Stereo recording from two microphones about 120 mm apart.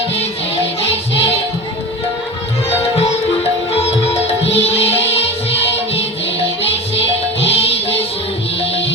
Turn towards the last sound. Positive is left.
turn(degrees=55)  # may be behind; listen again after turning